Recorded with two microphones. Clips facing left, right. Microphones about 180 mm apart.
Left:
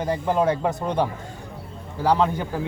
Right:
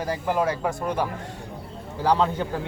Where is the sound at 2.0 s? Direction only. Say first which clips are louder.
Left 1 dB; 15° left (ahead or behind).